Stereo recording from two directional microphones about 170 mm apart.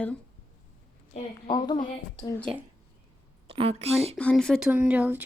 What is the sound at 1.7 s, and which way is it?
Speech, 45° left (ahead or behind).